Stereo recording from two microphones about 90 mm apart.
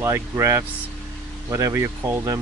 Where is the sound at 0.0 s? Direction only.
30° right (ahead or behind).